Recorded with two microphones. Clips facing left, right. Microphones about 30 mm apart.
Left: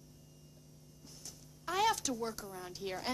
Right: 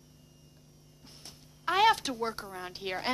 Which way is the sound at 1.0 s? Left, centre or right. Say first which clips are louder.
Right 2 dB; right.